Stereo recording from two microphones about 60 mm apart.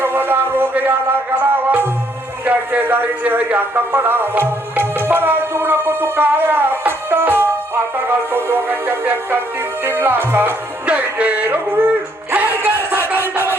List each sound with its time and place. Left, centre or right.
0.0 s music: right
2.4 s a man's voice: right
4.8 s music: right
7.9 s a man's voice: right
10.8 s music: right